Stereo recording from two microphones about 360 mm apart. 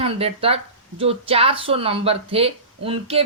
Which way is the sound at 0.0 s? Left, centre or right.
Centre.